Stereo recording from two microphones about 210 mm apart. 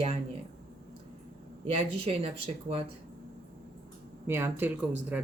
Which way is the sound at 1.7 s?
30° right (ahead or behind).